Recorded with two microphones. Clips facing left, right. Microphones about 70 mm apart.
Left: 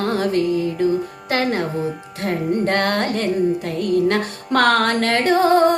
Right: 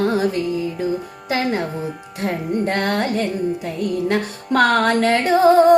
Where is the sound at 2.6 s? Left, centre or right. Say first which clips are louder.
Right 1 dB; centre.